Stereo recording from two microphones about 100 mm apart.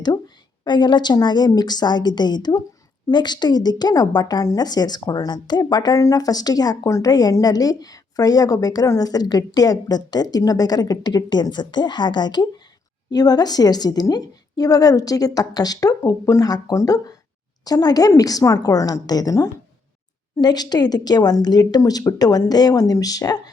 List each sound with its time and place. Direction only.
0.6 s a woman's voice: 50° left (ahead or behind)